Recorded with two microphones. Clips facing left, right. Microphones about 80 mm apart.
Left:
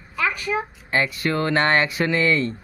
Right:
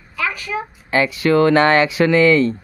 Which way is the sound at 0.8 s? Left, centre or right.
Right.